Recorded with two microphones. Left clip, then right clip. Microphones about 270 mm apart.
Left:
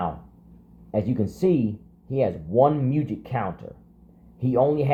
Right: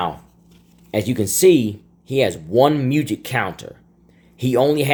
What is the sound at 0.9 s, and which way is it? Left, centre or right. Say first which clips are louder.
Speech: right 5 dB; right.